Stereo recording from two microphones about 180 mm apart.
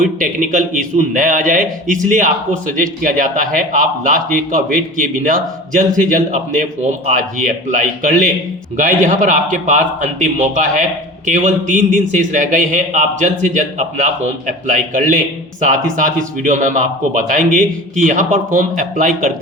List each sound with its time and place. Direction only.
0.0 s a man's voice: 45° right (ahead or behind)